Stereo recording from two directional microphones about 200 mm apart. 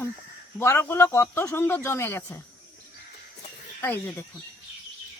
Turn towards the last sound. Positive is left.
turn(degrees=10)  # may be behind; listen again after turning